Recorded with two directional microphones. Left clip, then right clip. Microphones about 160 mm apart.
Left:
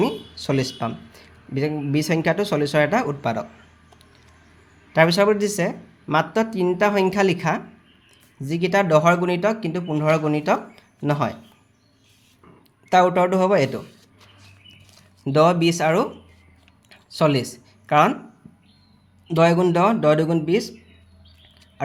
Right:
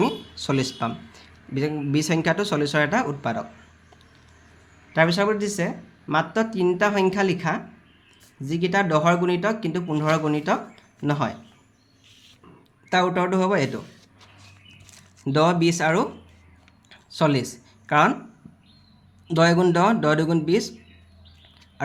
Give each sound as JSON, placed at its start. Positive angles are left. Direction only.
{"t": 0.0, "sound": "speech", "side_deg": 10}
{"t": 4.9, "sound": "speech", "side_deg": 30}
{"t": 12.9, "sound": "speech", "side_deg": 20}
{"t": 15.2, "sound": "speech", "side_deg": 15}
{"t": 16.9, "sound": "a sound", "side_deg": 10}
{"t": 19.3, "sound": "speech", "side_deg": 5}